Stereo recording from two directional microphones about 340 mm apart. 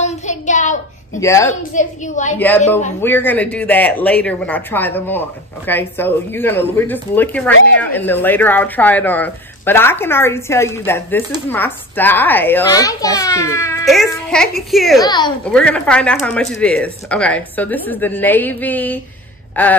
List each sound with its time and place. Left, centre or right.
0.0 s child singing: left
1.2 s a woman's voice: centre
1.7 s a woman's voice: left
2.3 s speech: centre
15.0 s speech: centre
19.5 s a sound: centre